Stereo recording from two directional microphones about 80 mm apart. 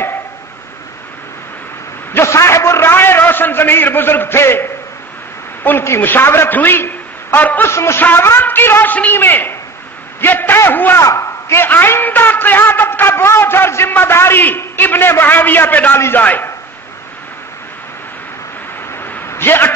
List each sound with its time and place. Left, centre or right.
2.1 s a man's voice: left
7.7 s a man's voice: left
11.0 s a man's voice: left
18.9 s a sound: left